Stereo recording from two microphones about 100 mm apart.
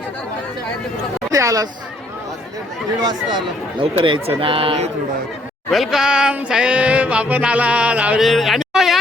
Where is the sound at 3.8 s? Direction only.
60° right (ahead or behind); by 4.9 s 75° right (ahead or behind).